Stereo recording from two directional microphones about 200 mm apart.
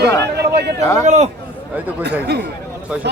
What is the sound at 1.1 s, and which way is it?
Speech, 35° right (ahead or behind).